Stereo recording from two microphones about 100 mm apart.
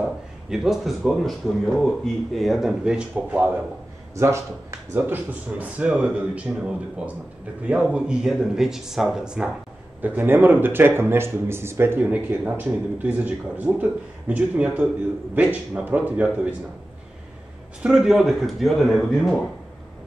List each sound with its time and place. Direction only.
0.5 s speech: 5° right (ahead or behind)
4.1 s speech: 30° right (ahead or behind); by 9.5 s 10° right (ahead or behind)
10.0 s speech: 20° right (ahead or behind)
17.8 s speech: 5° right (ahead or behind)